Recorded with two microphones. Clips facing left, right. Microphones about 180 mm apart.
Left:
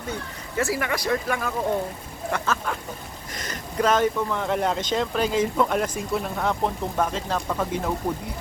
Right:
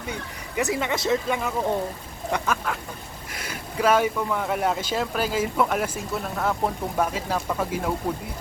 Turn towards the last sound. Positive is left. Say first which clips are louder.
# even
turn(degrees=-5)  # may be behind; listen again after turning